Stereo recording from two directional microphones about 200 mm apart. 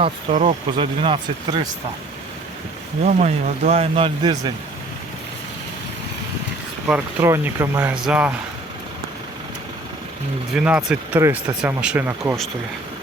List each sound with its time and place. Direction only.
0.0 s speech: 35° right (ahead or behind)
3.0 s speech: 35° right (ahead or behind)
6.8 s speech: 10° right (ahead or behind)
10.5 s speech: 5° right (ahead or behind)